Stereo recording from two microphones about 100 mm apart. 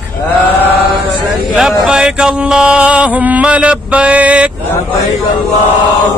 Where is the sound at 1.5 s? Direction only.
5° right (ahead or behind).